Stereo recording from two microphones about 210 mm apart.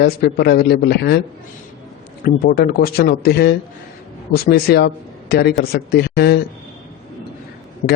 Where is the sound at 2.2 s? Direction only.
45° left (ahead or behind).